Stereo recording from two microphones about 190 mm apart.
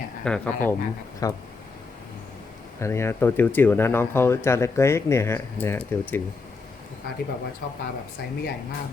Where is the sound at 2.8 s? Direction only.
15° left (ahead or behind).